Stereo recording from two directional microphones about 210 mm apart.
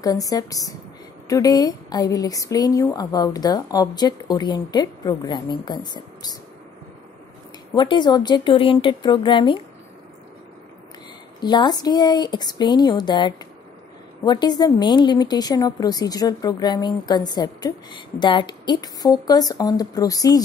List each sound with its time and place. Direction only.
0.0 s a woman's voice: 15° left (ahead or behind)
7.7 s a woman's voice: 20° left (ahead or behind)
11.4 s a woman's voice: 20° left (ahead or behind)